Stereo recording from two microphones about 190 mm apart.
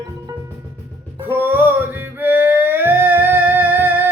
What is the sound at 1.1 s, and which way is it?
Music, 10° right (ahead or behind).